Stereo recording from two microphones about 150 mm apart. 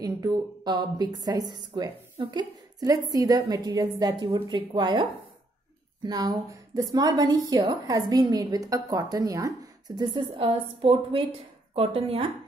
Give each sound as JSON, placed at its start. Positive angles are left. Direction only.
{"t": 0.0, "sound": "a woman's voice", "side_deg": -25}
{"t": 6.0, "sound": "a woman's voice", "side_deg": -25}
{"t": 10.3, "sound": "a woman's voice", "side_deg": -40}